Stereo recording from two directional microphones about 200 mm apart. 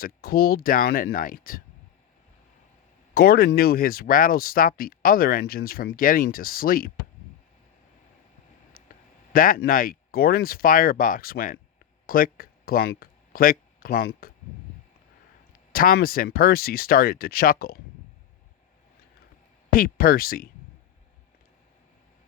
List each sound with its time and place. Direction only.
0.0 s speech: 50° left (ahead or behind)
3.2 s speech: 50° left (ahead or behind)
9.3 s speech: 45° left (ahead or behind)
15.7 s speech: 45° left (ahead or behind)
19.7 s speech: 45° left (ahead or behind)